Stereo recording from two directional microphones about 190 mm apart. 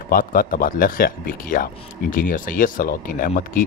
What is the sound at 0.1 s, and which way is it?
Speech, 50° left (ahead or behind).